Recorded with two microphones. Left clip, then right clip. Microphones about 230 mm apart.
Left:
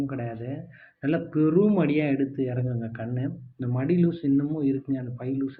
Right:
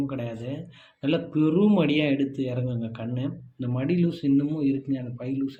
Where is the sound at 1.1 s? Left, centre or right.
Left.